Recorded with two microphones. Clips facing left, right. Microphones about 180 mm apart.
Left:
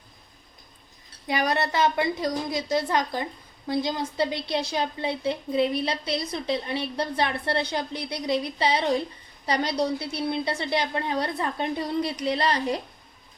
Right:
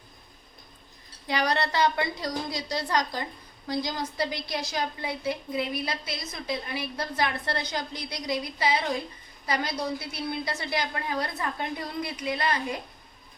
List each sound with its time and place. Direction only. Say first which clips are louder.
1.3 s a woman's voice: left 2 dB; 20° left (ahead or behind)